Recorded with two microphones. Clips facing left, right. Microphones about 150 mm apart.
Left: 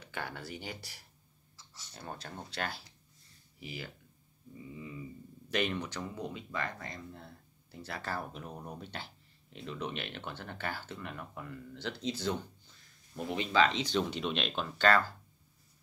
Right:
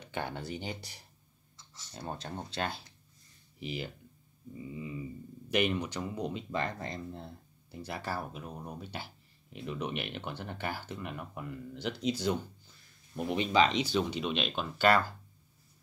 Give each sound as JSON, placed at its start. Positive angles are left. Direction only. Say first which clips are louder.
{"t": 0.0, "sound": "speech", "louder": "right 4 dB", "side_deg": -20}
{"t": 7.7, "sound": "speech", "louder": "right 2 dB", "side_deg": -15}
{"t": 13.8, "sound": "speech", "louder": "right 1 dB", "side_deg": -5}